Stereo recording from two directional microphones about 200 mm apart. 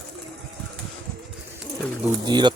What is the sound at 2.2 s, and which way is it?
Speech, 20° right (ahead or behind).